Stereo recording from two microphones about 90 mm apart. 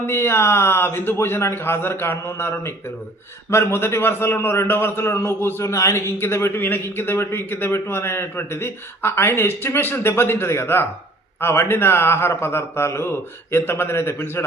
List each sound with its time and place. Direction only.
0.0 s a man's voice: 25° left (ahead or behind)